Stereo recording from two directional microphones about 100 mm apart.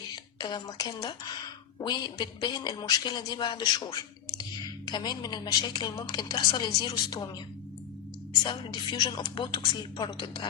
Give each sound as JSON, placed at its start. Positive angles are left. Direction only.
{"t": 0.3, "sound": "a woman's voice", "side_deg": 45}
{"t": 8.4, "sound": "a woman's voice", "side_deg": 50}